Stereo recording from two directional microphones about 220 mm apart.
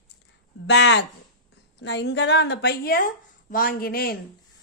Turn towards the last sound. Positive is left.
turn(degrees=40)  # may be behind; listen again after turning